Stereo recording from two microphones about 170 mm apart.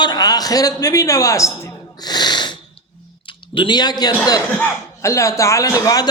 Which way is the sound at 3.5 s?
25° left (ahead or behind).